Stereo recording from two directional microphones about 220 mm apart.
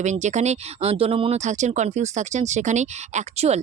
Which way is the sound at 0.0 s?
35° right (ahead or behind).